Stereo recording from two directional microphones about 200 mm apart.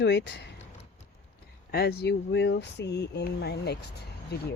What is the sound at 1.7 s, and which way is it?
Speech, 55° left (ahead or behind).